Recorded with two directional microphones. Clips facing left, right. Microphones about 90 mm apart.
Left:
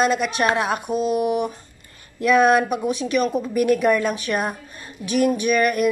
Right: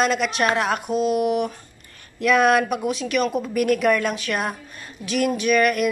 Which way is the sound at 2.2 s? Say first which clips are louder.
Left 1 dB; 30° left (ahead or behind).